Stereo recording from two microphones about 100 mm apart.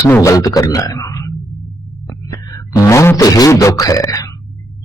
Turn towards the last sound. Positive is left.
turn(degrees=35)  # may be behind; listen again after turning